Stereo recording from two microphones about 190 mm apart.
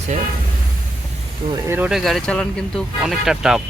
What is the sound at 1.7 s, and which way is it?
Speech, 5° right (ahead or behind).